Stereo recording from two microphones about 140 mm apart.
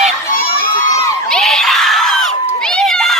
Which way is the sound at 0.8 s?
25° left (ahead or behind).